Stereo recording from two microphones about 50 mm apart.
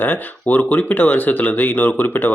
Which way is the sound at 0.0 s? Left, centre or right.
Left.